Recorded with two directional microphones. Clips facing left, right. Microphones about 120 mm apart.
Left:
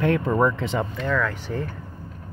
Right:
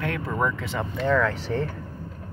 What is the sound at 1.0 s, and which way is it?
Speech, 30° right (ahead or behind).